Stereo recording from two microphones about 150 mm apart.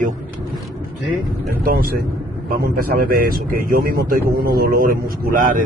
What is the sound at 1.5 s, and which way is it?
A man's voice, 75° right (ahead or behind).